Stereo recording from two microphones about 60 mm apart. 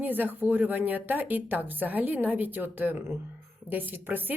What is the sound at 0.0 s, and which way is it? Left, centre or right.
A woman's voice, right.